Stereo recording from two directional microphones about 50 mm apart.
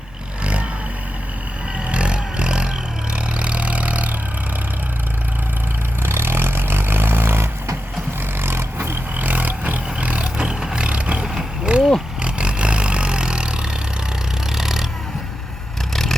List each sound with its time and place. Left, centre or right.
1.9 s vehicle: right
6.0 s vehicle: right
10.3 s vehicle: centre
11.7 s a sound: right
12.2 s vehicle: right
14.5 s a sound: centre
15.9 s vehicle: centre